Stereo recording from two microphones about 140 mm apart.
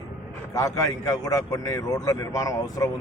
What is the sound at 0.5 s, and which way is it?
Speech, 25° left (ahead or behind).